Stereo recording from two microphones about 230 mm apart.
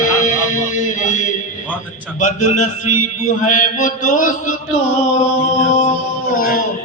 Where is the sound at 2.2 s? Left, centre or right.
Left.